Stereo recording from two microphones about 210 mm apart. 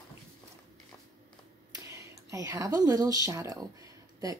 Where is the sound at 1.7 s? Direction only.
15° right (ahead or behind).